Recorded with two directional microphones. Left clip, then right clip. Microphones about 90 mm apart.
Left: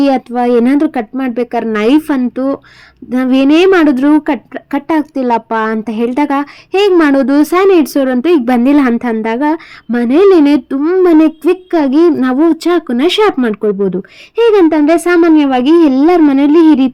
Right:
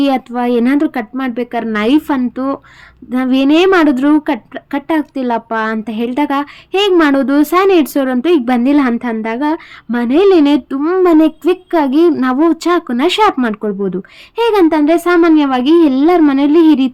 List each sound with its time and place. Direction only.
0.0 s speech: 35° left (ahead or behind)
5.7 s speech: 50° left (ahead or behind)
8.4 s a woman's voice: 60° left (ahead or behind); by 15.7 s 45° left (ahead or behind)
15.7 s a woman's voice: 55° left (ahead or behind)